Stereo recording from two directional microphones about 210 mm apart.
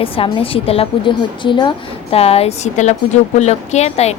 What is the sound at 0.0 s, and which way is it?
A woman's voice, 25° left (ahead or behind).